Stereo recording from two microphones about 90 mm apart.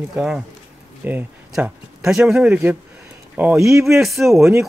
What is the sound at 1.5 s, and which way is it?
Speech, 5° right (ahead or behind).